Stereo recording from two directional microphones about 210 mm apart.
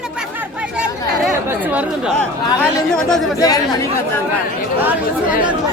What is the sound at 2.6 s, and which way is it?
Speech, 5° left (ahead or behind).